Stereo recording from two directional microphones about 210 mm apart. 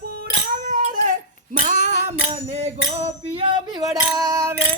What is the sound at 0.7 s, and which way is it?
Child singing, 40° right (ahead or behind).